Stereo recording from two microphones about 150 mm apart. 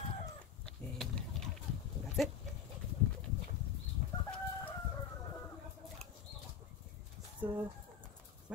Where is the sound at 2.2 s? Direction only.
Centre (ahead or behind).